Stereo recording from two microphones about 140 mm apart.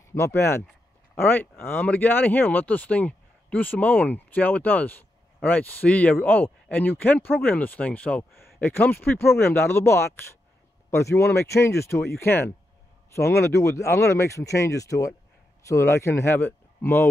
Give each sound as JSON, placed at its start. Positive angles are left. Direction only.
{"t": 0.1, "sound": "speech", "side_deg": 15}